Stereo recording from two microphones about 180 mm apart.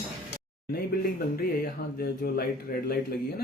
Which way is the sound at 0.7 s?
60° left (ahead or behind).